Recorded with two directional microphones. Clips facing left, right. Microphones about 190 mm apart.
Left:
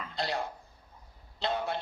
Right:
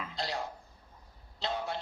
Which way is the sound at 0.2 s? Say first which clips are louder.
Left 4 dB; 60° left (ahead or behind).